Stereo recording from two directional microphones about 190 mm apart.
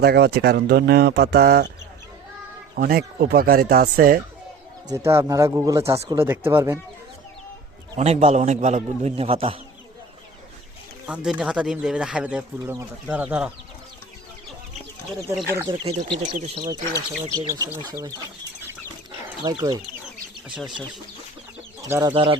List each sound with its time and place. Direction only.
0.0 s speech: 60° right (ahead or behind)
2.7 s speech: 50° right (ahead or behind)
4.9 s speech: 15° right (ahead or behind)
7.9 s a man's voice: 35° right (ahead or behind)
11.0 s speech: 5° right (ahead or behind)
15.5 s speech: 20° right (ahead or behind)
15.9 s a man's voice: 35° right (ahead or behind)
16.6 s speech: 20° right (ahead or behind)
19.4 s speech: 20° right (ahead or behind)
21.8 s speech: 15° right (ahead or behind)
22.1 s speech: 30° right (ahead or behind)